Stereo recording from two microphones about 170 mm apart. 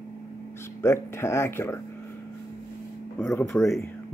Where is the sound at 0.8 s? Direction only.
15° left (ahead or behind).